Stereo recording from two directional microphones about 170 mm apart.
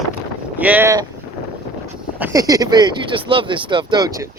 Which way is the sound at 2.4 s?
20° right (ahead or behind).